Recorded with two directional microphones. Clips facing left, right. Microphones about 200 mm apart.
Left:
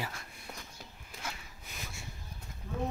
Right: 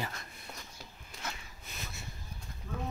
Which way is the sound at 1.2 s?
10° left (ahead or behind).